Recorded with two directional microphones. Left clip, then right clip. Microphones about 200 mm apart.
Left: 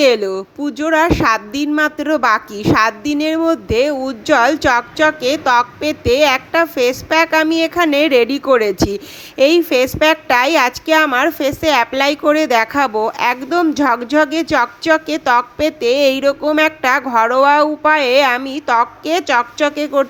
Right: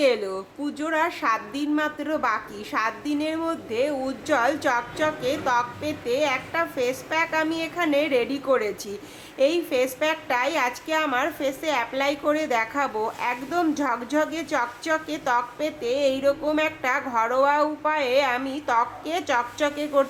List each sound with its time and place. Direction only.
0.0 s a woman's voice: 30° left (ahead or behind)